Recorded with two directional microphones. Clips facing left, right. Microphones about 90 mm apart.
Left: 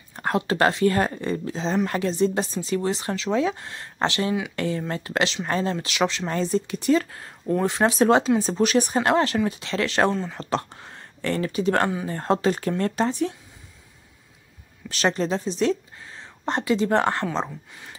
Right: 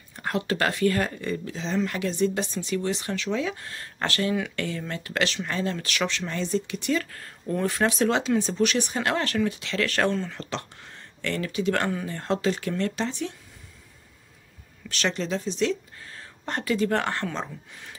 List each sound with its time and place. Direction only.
0.1 s a sound: 35° left (ahead or behind)
0.4 s speech: 30° left (ahead or behind)
7.1 s speech: 20° left (ahead or behind); by 13.3 s 40° left (ahead or behind)
14.9 s speech: 35° left (ahead or behind)
16.0 s speech: 20° left (ahead or behind)